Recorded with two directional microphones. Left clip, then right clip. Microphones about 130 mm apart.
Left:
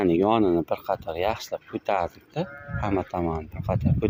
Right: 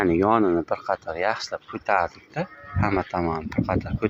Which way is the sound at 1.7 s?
15° left (ahead or behind).